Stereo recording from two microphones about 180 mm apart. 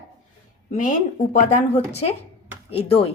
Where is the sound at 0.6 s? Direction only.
45° left (ahead or behind).